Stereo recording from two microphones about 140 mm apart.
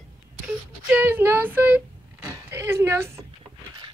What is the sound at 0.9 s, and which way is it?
Whimper, 15° right (ahead or behind).